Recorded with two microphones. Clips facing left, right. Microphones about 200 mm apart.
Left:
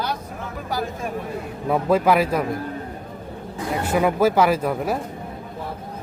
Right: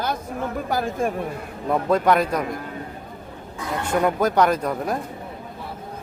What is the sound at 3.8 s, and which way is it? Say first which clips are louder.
Speech: left 2 dB; 5° left (ahead or behind).